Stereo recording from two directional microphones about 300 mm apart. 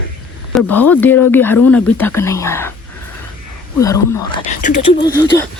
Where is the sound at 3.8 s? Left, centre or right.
Centre.